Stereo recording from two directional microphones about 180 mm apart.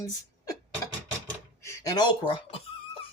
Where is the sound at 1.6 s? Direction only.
15° left (ahead or behind).